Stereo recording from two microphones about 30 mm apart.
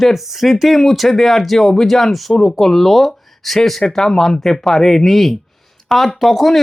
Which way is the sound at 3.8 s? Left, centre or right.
Centre.